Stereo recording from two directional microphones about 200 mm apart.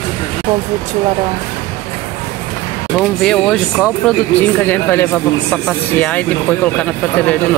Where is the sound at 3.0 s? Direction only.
Centre (ahead or behind).